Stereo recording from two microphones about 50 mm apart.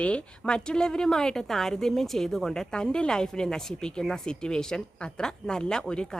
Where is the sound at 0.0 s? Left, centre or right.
Left.